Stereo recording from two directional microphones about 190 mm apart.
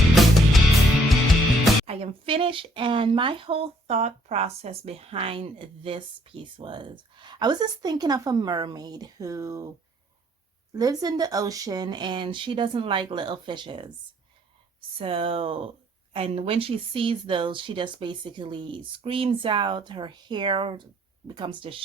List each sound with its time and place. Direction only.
0.1 s music: centre (ahead or behind)
1.9 s speech: 30° right (ahead or behind)
10.8 s speech: 20° right (ahead or behind)